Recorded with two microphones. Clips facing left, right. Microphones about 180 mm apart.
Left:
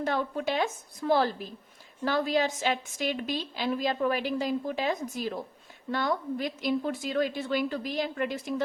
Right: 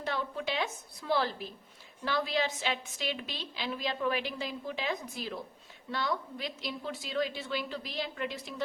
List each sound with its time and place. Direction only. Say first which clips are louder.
0.0 s a woman's voice: left 6 dB; 50° left (ahead or behind)